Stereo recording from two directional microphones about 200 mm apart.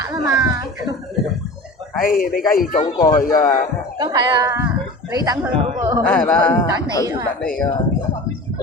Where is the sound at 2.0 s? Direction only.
45° left (ahead or behind).